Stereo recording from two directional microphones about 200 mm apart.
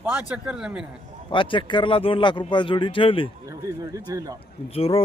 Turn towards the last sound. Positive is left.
turn(degrees=30)  # may be behind; listen again after turning